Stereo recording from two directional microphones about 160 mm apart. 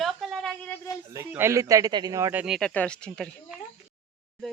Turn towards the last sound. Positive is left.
turn(degrees=0)  # may be behind; listen again after turning